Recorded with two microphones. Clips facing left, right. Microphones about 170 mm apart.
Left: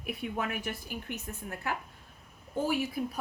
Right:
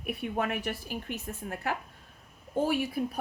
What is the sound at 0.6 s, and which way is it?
Speech, 85° right.